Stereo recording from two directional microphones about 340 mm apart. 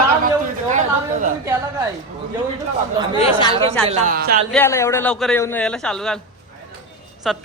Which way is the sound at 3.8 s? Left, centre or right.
Centre.